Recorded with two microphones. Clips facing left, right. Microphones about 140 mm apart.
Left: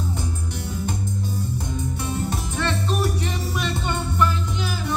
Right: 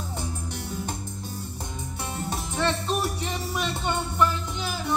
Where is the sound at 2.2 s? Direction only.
25° right (ahead or behind).